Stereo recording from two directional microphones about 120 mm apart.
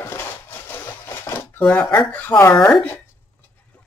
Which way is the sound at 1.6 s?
5° left (ahead or behind).